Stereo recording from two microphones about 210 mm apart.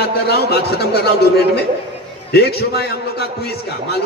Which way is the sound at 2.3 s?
50° left (ahead or behind).